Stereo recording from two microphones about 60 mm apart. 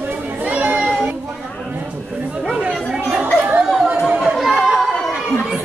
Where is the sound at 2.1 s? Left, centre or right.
Right.